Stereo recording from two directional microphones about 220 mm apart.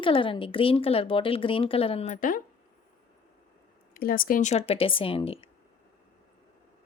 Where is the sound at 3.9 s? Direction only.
40° left (ahead or behind); by 5.5 s 25° left (ahead or behind).